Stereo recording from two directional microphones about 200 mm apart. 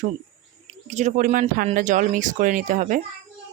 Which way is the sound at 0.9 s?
35° right (ahead or behind).